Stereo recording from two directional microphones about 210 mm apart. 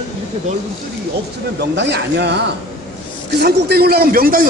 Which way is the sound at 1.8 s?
55° right (ahead or behind).